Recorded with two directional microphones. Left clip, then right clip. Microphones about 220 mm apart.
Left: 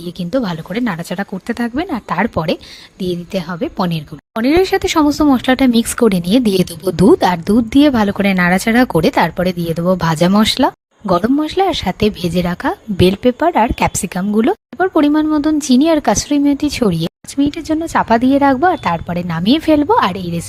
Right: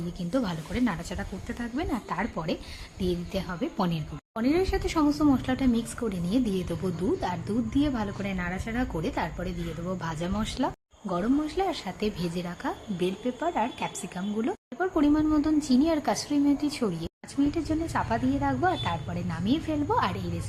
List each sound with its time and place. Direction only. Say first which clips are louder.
0.2 s a woman's voice: left 12 dB; 35° left (ahead or behind)